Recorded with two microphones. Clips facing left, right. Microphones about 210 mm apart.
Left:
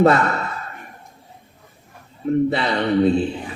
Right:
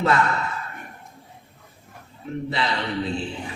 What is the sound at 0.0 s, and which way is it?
Speech, 55° left (ahead or behind).